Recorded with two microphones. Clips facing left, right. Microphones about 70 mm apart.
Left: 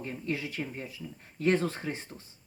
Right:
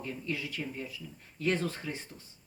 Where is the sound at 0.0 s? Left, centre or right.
Left.